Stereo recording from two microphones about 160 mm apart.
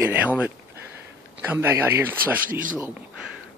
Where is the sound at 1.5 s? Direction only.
15° right (ahead or behind).